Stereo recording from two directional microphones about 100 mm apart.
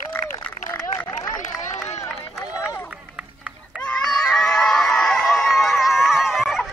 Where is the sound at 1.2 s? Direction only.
35° left (ahead or behind).